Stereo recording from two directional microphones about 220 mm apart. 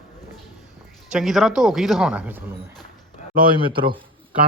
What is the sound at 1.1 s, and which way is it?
Speech, centre (ahead or behind).